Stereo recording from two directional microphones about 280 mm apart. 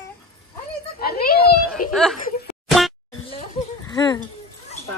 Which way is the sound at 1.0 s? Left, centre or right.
Left.